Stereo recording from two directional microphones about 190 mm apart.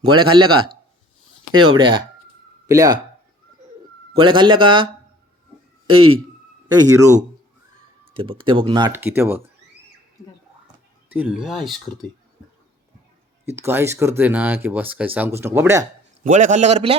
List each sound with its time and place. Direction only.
0.0 s speech: 25° right (ahead or behind)
1.8 s speech: 25° right (ahead or behind)
4.1 s speech: 25° right (ahead or behind)
6.7 s speech: 15° right (ahead or behind)
8.1 s speech: 30° right (ahead or behind)
8.9 s speech: 10° right (ahead or behind)
11.1 s speech: 5° right (ahead or behind)
13.4 s speech: 15° right (ahead or behind)
16.2 s a man's voice: 40° right (ahead or behind)